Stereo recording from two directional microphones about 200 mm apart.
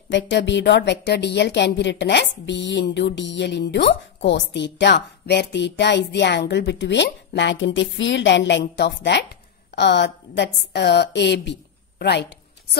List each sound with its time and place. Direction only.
0.1 s a woman's voice: 60° left (ahead or behind)